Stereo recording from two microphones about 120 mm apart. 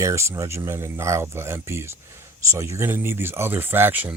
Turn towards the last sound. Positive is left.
turn(degrees=-15)  # may be behind; listen again after turning